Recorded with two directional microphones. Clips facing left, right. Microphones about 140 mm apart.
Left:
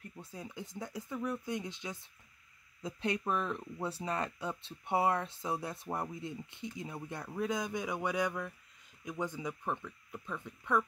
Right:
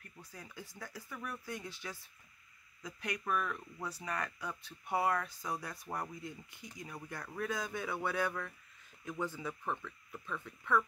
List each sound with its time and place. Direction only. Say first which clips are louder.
0.0 s speech: left 6 dB; 25° left (ahead or behind)